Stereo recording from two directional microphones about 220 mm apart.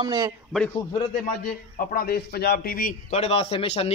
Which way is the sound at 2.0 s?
45° left (ahead or behind).